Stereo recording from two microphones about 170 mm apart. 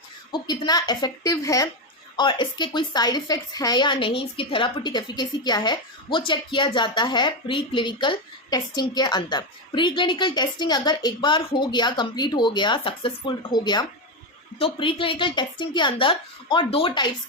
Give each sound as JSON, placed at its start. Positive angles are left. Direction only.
{"t": 0.3, "sound": "a woman's voice", "side_deg": 25}